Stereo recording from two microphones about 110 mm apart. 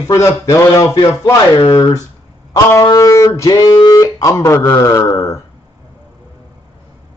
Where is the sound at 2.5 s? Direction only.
30° left (ahead or behind).